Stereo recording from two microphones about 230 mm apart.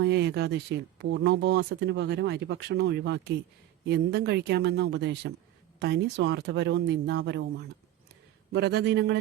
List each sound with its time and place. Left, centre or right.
0.0 s speech: right
8.5 s speech: right